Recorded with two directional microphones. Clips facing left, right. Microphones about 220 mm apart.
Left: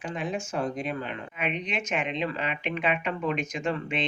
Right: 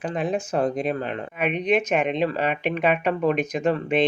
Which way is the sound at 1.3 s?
60° right (ahead or behind).